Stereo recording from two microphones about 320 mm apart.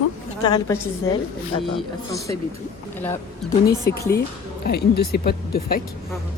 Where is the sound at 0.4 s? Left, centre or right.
Centre.